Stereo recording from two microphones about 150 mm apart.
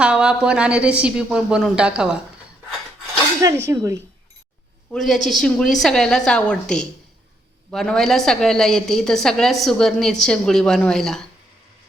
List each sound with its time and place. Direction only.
0.0 s a woman's voice: 5° right (ahead or behind)
3.4 s speech: 20° right (ahead or behind)
4.9 s a woman's voice: centre (ahead or behind)